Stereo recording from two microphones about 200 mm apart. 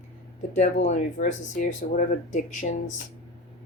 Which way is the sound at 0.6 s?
35° left (ahead or behind).